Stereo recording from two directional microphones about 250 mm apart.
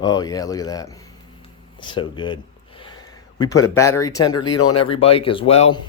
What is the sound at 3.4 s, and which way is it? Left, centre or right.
A man's voice, centre.